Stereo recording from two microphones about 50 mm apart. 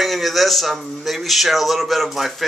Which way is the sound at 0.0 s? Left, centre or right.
Centre.